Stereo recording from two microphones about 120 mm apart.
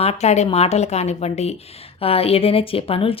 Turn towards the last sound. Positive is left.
turn(degrees=50)  # may be behind; listen again after turning